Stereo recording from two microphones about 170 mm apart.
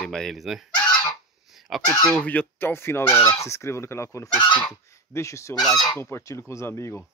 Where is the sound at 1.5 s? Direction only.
Centre (ahead or behind); by 5.6 s 15° left (ahead or behind).